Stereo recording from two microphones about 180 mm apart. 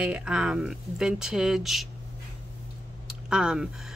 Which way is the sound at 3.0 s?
5° right (ahead or behind).